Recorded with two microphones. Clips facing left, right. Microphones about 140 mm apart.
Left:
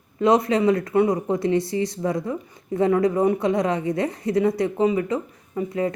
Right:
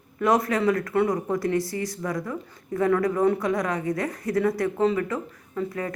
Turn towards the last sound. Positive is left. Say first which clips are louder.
# left 5 dB
turn(degrees=20)  # may be behind; listen again after turning